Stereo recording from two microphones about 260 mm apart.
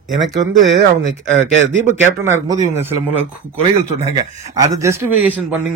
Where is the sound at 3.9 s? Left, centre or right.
Right; by 5.6 s centre.